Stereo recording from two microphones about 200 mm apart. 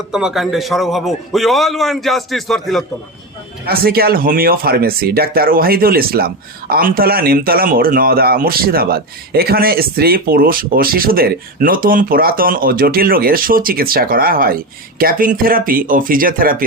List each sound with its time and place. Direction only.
0.1 s a man's voice: 5° right (ahead or behind)
3.7 s speech: 50° right (ahead or behind)